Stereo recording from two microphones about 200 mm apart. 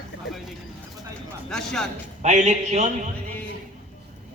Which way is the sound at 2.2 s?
35° right (ahead or behind).